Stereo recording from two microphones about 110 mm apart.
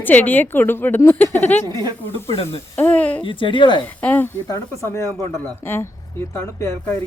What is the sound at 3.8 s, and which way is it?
Speech, 15° left (ahead or behind).